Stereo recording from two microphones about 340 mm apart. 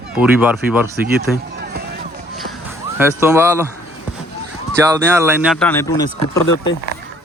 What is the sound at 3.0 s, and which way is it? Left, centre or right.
Speech, centre.